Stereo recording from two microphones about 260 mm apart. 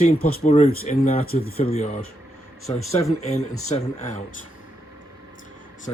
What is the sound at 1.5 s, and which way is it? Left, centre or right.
Speech, left.